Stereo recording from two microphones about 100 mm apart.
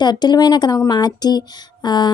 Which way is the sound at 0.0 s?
45° left (ahead or behind).